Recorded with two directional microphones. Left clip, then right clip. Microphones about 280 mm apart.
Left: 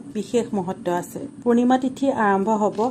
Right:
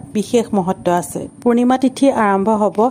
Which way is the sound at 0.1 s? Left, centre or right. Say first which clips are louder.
Right 7 dB; right.